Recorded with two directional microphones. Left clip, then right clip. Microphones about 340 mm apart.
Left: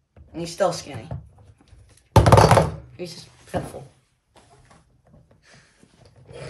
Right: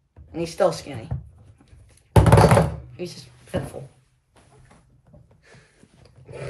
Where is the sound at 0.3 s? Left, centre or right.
Centre.